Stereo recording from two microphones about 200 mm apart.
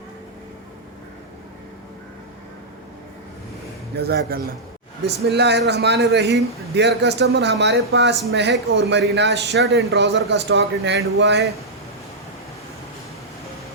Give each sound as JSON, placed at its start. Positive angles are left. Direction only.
{"t": 3.9, "sound": "a man's voice", "side_deg": -55}